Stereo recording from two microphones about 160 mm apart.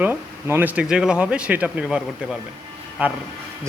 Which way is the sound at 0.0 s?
15° right (ahead or behind).